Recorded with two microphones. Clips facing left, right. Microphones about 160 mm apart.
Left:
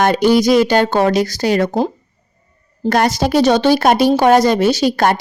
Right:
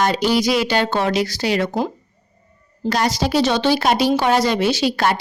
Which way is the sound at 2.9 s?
50° left (ahead or behind).